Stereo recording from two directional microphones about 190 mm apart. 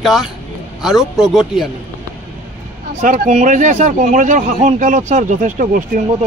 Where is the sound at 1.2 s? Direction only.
Centre (ahead or behind).